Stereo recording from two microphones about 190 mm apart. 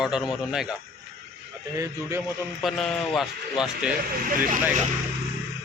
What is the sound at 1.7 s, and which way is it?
Speech, 15° right (ahead or behind).